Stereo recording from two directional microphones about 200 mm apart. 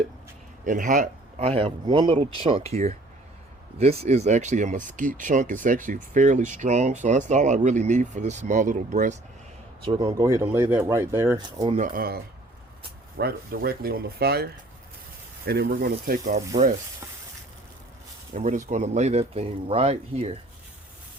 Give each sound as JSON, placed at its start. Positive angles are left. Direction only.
{"t": 0.6, "sound": "speech", "side_deg": -40}
{"t": 9.8, "sound": "speech", "side_deg": -20}
{"t": 11.8, "sound": "speech", "side_deg": -45}
{"t": 18.3, "sound": "speech", "side_deg": -40}